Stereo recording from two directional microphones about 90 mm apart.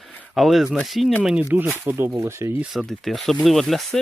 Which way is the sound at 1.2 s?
15° right (ahead or behind).